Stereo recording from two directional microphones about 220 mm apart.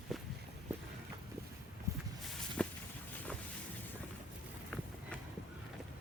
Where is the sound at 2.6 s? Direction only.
5° left (ahead or behind).